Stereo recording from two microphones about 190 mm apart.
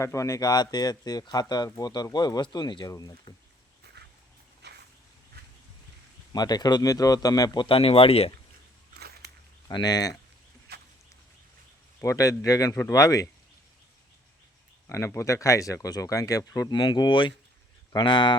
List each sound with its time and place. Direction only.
0.0 s speech: 15° left (ahead or behind)
4.0 s a sound: 60° right (ahead or behind)
6.3 s speech: 20° left (ahead or behind)
9.0 s a sound: 55° right (ahead or behind)
9.6 s speech: 20° left (ahead or behind)
11.9 s speech: 15° left (ahead or behind)
14.8 s speech: 15° left (ahead or behind)